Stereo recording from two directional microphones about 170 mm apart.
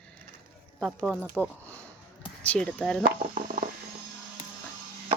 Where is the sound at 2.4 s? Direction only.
5° left (ahead or behind).